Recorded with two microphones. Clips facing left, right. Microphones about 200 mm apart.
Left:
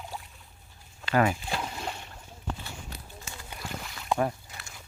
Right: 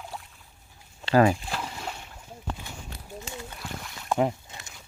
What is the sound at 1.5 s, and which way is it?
Boat, centre (ahead or behind).